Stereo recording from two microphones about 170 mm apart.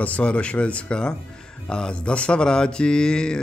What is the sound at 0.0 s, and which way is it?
Speech, 5° left (ahead or behind).